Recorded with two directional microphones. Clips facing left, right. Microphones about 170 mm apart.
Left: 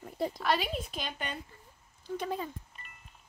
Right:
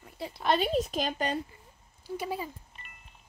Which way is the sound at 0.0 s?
45° left (ahead or behind).